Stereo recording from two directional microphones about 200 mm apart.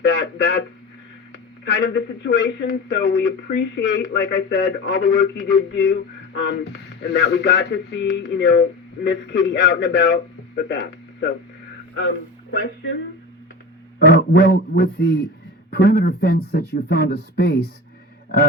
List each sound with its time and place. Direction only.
0.0 s radio: 60° left (ahead or behind)
1.3 s a man's voice: 55° left (ahead or behind)
14.3 s speech: 55° left (ahead or behind)